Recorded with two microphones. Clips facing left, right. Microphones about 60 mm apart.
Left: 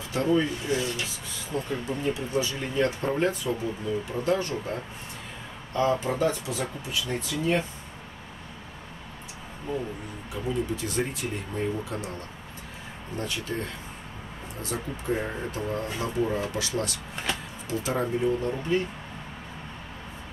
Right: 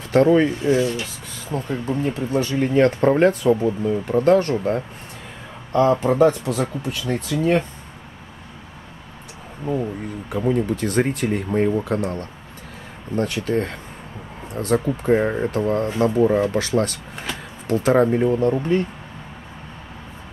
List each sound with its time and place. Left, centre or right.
0.1 s speech: right
0.7 s rub: right
1.5 s speech: right
10.3 s speech: right